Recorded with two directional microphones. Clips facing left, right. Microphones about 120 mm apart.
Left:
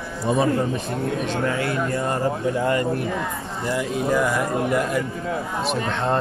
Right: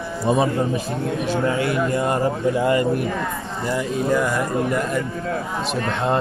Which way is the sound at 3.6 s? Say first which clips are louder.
Right 1 dB; 5° left (ahead or behind).